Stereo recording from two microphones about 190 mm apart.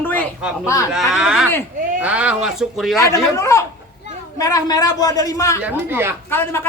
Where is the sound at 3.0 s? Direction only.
15° left (ahead or behind).